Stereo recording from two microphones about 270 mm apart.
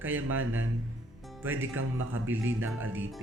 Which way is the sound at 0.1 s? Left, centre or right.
Right.